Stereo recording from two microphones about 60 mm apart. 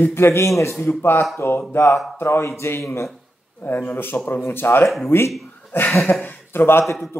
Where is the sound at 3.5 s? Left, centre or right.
Left.